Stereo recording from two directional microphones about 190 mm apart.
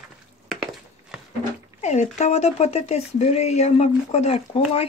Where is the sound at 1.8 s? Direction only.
35° left (ahead or behind).